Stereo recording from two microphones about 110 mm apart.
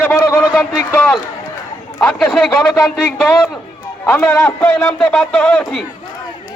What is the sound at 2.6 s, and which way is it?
Speech, 20° left (ahead or behind).